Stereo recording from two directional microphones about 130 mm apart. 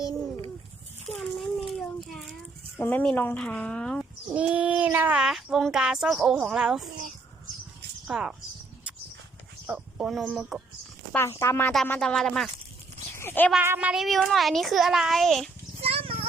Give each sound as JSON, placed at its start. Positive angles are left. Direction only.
{"t": 1.4, "sound": "a sound", "side_deg": 0}
{"t": 2.7, "sound": "speech", "side_deg": 15}
{"t": 4.4, "sound": "speech", "side_deg": -10}
{"t": 8.0, "sound": "speech", "side_deg": -5}
{"t": 9.6, "sound": "a sound", "side_deg": -10}
{"t": 10.2, "sound": "speech", "side_deg": -5}
{"t": 11.1, "sound": "speech", "side_deg": 20}
{"t": 11.9, "sound": "speech", "side_deg": 5}
{"t": 13.1, "sound": "a child's voice", "side_deg": 15}
{"t": 13.6, "sound": "speech", "side_deg": -15}
{"t": 15.8, "sound": "a sound", "side_deg": -50}